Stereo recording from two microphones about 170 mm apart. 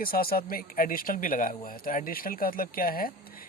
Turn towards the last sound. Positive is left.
turn(degrees=60)  # may be behind; listen again after turning